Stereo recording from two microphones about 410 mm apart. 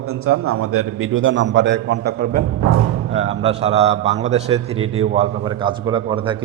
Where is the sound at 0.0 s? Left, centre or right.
Right.